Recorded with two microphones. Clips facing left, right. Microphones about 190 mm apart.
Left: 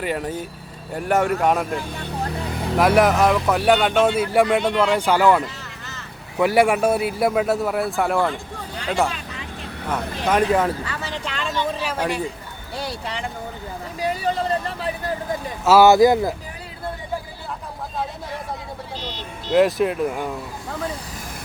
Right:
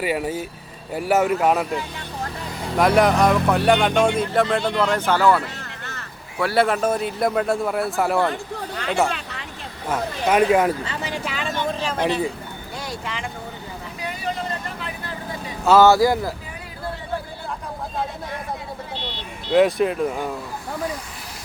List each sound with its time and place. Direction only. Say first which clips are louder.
0.0 s a man's voice: right 2 dB; 10° right (ahead or behind); by 5.5 s 15° left (ahead or behind)
5.8 s a sound: right 2 dB; 60° right (ahead or behind)
6.4 s a man's voice: left 3 dB; 15° left (ahead or behind); by 8.3 s centre (ahead or behind)
8.3 s speech: right 2 dB; 60° right (ahead or behind)
10.2 s speech: right 2 dB; 10° right (ahead or behind)
11.8 s speech: right 2 dB; 10° left (ahead or behind)
12.7 s vehicle: left 3 dB; 30° left (ahead or behind)
15.6 s speech: left 1 dB; 5° left (ahead or behind)
15.9 s speech: left 3 dB; 20° left (ahead or behind)
18.9 s speech: even; 40° left (ahead or behind)
19.5 s a man's voice: even; centre (ahead or behind)